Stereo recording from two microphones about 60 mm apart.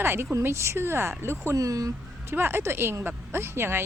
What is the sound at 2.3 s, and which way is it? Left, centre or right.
A woman's voice, right.